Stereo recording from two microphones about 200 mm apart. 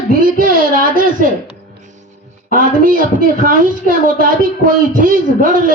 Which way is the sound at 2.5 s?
45° right (ahead or behind).